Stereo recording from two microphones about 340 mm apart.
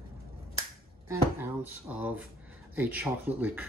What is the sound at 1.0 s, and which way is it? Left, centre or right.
Speech, centre.